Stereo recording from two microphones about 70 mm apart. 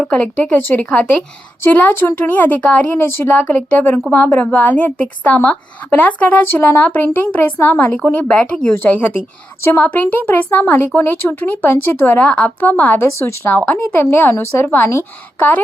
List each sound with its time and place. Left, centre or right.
0.0 s speech: centre
0.9 s speech: centre
1.6 s a woman's voice: left; by 8.7 s centre
8.7 s a woman's voice: left
13.0 s speech: left
13.6 s a woman's voice: left